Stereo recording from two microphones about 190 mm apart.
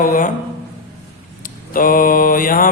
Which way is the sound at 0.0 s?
45° left (ahead or behind).